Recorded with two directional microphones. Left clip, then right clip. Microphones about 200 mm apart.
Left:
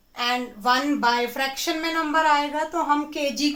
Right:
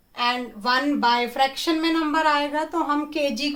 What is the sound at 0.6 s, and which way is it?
A woman's voice, 35° right (ahead or behind).